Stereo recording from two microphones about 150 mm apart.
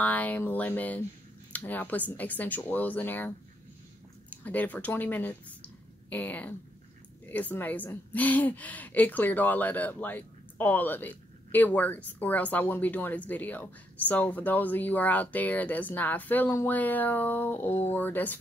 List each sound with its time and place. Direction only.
0.0 s a woman's voice: 10° left (ahead or behind)